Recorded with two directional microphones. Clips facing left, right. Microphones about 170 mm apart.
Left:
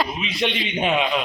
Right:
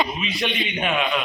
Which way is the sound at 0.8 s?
25° left (ahead or behind).